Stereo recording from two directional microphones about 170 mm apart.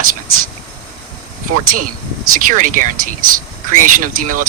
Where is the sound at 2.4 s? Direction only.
50° right (ahead or behind).